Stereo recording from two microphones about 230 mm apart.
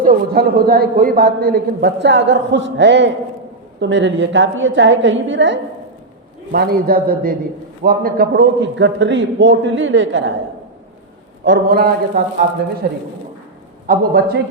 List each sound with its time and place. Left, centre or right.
0.0 s a man's voice: right
6.5 s a man's voice: right
11.4 s a man's voice: right